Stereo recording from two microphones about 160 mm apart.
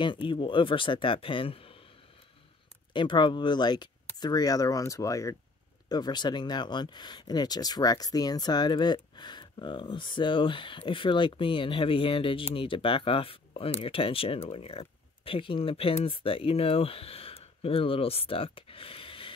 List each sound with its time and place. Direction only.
0.0 s speech: 30° left (ahead or behind)
2.9 s speech: 30° left (ahead or behind)